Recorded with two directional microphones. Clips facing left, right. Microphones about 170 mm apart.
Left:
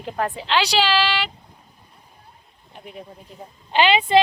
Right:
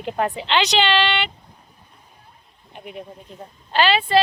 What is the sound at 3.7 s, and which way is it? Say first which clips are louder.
Speech: left 1 dB; 20° left (ahead or behind).